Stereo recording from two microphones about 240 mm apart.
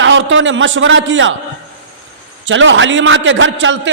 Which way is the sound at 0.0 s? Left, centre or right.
Right.